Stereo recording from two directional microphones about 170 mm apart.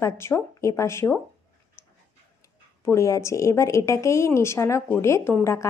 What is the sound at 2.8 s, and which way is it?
A woman's voice, 15° left (ahead or behind).